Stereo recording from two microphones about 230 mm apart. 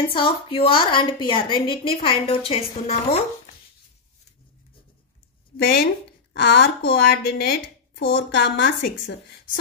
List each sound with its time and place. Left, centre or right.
0.1 s a woman's voice: left
5.6 s a woman's voice: left